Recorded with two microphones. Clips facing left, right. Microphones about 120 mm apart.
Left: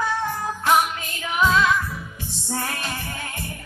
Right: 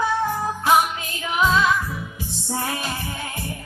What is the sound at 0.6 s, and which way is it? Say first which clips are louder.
Music: right 1 dB; 10° right (ahead or behind).